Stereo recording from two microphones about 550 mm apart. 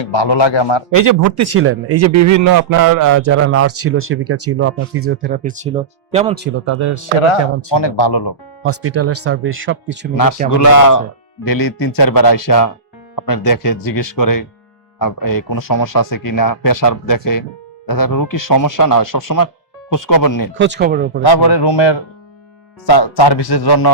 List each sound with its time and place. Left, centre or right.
0.0 s a man's voice: left
0.9 s a man's voice: right; by 6.5 s centre
6.7 s speech: right
7.7 s a man's voice: left
8.6 s a man's voice: right
10.5 s speech: left
20.6 s speech: centre
21.2 s a man's voice: left